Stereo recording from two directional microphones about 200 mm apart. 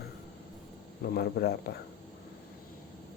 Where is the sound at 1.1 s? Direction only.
50° left (ahead or behind).